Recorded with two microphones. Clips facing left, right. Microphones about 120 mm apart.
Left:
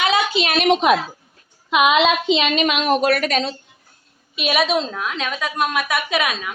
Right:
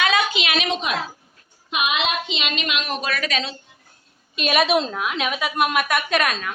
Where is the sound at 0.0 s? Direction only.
25° left (ahead or behind).